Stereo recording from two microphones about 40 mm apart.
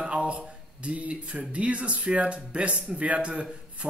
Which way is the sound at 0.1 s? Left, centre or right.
Right.